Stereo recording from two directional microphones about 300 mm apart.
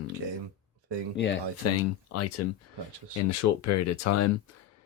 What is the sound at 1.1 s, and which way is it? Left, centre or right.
Speech, left.